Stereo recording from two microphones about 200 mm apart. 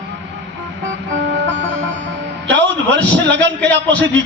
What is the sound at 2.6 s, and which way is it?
A man's voice, 65° right (ahead or behind).